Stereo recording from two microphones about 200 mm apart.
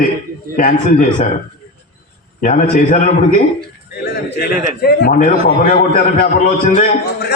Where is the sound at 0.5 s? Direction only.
40° left (ahead or behind).